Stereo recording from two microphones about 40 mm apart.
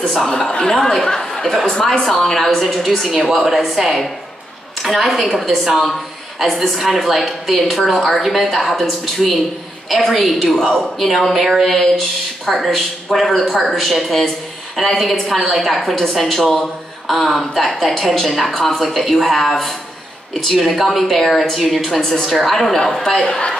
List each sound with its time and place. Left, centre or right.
0.5 s a woman's voice: centre
11.3 s a woman's voice: centre
11.6 s a woman's voice: centre
20.5 s a woman's voice: centre